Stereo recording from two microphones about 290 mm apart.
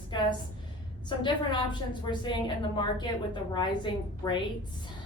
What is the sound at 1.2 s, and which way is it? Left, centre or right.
Speech, centre.